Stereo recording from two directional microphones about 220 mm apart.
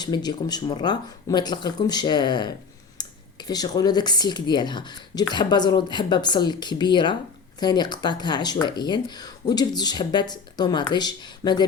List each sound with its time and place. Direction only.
0.0 s speech: 20° left (ahead or behind)